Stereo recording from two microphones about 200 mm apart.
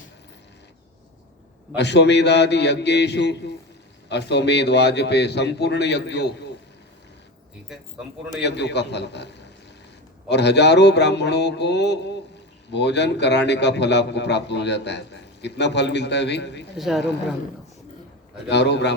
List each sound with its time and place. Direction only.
1.7 s a man's voice: 60° left (ahead or behind)
8.4 s a man's voice: 60° left (ahead or behind)
16.7 s speech: centre (ahead or behind)
18.4 s a man's voice: 60° left (ahead or behind)